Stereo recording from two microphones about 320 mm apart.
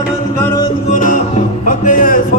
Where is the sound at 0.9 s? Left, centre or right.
Left.